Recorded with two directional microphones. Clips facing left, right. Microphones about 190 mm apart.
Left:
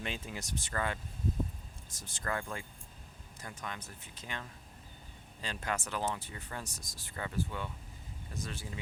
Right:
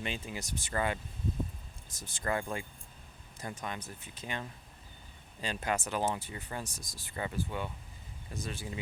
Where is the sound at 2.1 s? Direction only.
20° right (ahead or behind).